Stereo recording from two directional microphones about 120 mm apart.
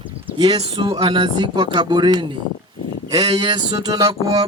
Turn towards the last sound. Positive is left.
turn(degrees=-35)  # may be behind; listen again after turning